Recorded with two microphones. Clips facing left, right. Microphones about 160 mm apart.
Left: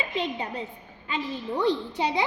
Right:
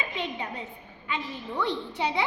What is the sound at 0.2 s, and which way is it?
A woman's voice, 35° left (ahead or behind).